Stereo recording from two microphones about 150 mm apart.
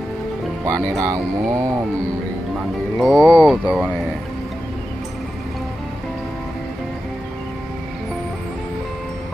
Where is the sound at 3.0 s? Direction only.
Centre (ahead or behind).